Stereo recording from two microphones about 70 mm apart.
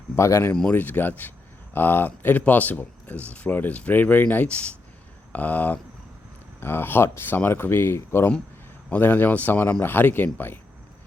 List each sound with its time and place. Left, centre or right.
0.2 s speech: left
0.7 s speech: left